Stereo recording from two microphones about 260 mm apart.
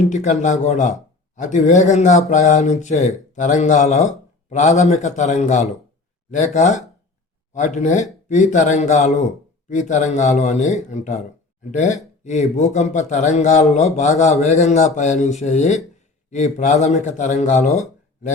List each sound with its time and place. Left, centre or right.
0.1 s speech: left